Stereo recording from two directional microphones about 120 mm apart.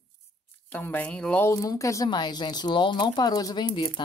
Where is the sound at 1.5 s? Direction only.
25° left (ahead or behind).